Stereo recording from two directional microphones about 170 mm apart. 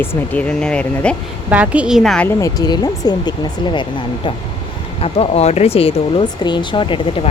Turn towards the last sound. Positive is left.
turn(degrees=30)  # may be behind; listen again after turning